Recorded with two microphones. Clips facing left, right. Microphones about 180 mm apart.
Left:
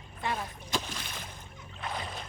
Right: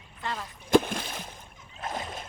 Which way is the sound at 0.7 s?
55° right (ahead or behind).